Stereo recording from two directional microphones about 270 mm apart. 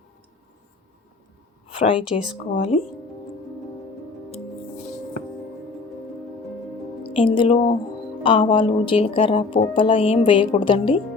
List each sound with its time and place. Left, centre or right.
1.6 s a sound: centre
2.5 s speech: left
7.0 s a woman's voice: centre